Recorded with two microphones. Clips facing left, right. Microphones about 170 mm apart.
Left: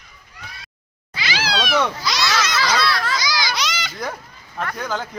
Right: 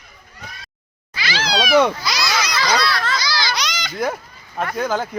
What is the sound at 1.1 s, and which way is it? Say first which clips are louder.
Cat: right 1 dB; 20° left (ahead or behind).